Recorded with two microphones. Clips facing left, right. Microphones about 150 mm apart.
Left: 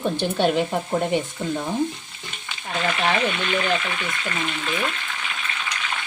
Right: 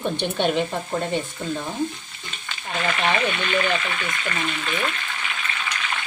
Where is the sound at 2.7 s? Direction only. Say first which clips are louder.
Even; centre (ahead or behind).